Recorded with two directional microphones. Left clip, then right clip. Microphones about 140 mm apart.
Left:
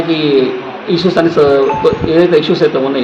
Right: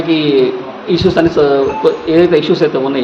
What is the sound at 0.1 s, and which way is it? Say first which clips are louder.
Speech: right 1 dB; 15° right (ahead or behind).